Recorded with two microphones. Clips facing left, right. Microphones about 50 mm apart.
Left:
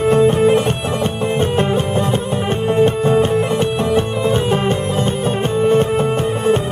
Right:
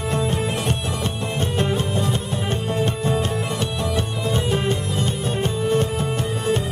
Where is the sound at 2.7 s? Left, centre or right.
Left.